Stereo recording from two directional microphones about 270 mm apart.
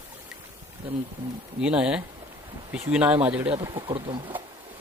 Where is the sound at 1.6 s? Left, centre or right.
Centre.